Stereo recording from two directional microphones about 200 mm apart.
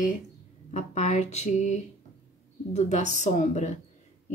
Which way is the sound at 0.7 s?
35° left (ahead or behind).